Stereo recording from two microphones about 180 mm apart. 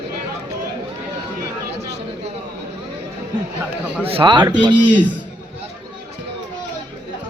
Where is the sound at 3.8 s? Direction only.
10° right (ahead or behind).